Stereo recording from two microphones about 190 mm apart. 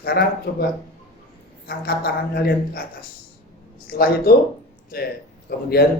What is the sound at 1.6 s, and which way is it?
Speech, 55° left (ahead or behind).